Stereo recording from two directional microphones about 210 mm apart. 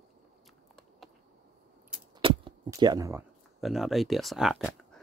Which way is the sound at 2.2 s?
20° right (ahead or behind).